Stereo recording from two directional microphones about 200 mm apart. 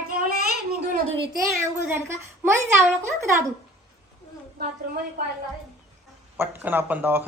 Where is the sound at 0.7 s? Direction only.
50° right (ahead or behind).